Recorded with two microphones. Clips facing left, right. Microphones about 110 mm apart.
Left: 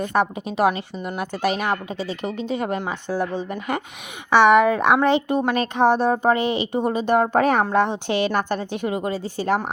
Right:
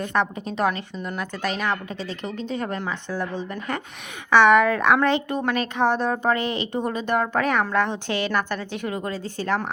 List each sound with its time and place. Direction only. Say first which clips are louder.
0.0 s a woman's voice: left 3 dB; 10° left (ahead or behind)